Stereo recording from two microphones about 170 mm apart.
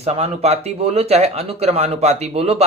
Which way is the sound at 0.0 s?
40° right (ahead or behind).